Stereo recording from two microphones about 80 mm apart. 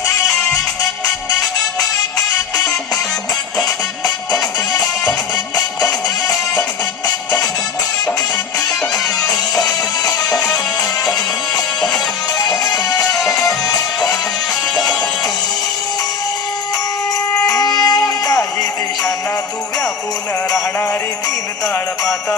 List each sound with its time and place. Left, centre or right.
4.7 s music: centre
9.6 s music: left
10.2 s music: centre
12.4 s music: left
13.1 s music: centre
13.7 s music: left
17.7 s music: left